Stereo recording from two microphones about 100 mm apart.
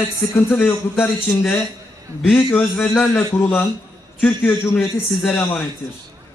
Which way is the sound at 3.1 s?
25° left (ahead or behind).